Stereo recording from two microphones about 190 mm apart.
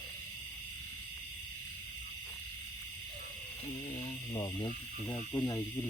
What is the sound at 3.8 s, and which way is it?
Speech, 25° left (ahead or behind).